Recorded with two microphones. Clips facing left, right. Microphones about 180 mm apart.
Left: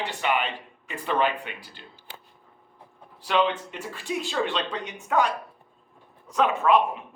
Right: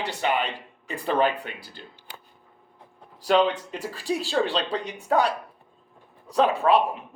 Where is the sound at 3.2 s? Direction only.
40° right (ahead or behind).